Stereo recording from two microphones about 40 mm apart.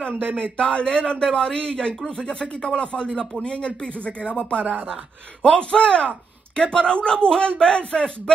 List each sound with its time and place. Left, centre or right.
0.1 s a man's voice: right
0.4 s a man's voice: left
4.6 s speech: right
5.6 s a man's voice: left